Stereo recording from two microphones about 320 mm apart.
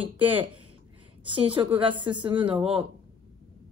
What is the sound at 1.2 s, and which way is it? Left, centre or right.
A woman's voice, centre.